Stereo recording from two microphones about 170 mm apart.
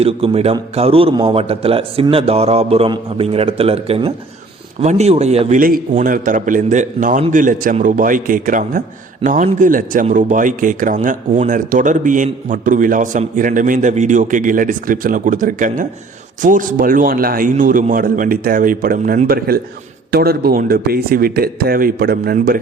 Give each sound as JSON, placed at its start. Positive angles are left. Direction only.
{"t": 0.0, "sound": "a man's voice", "side_deg": -35}
{"t": 5.5, "sound": "speech", "side_deg": -60}